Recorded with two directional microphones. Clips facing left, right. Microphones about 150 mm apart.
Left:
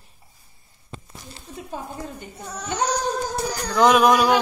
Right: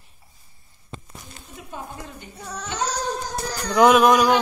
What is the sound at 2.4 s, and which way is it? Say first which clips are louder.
Child singing: left 2 dB; 10° left (ahead or behind).